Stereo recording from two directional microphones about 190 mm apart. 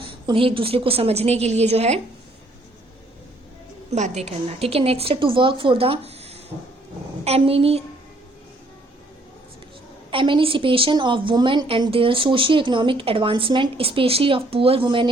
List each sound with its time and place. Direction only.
0.0 s a woman's voice: 30° right (ahead or behind)
3.9 s a woman's voice: 35° right (ahead or behind)
10.1 s a woman's voice: 25° right (ahead or behind)